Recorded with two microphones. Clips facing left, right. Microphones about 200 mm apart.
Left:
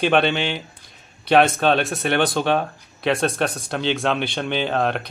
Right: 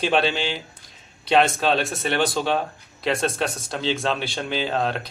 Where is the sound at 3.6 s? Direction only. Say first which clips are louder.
Left 2 dB; 65° left (ahead or behind).